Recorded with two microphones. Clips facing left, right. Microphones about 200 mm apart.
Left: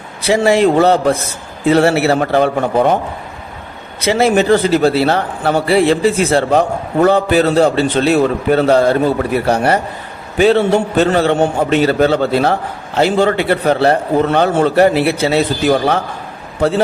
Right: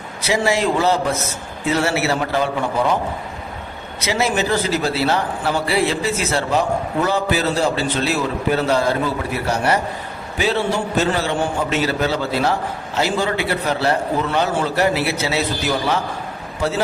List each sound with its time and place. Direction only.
0.3 s a man's voice: 60° left (ahead or behind)
4.2 s a man's voice: 55° left (ahead or behind)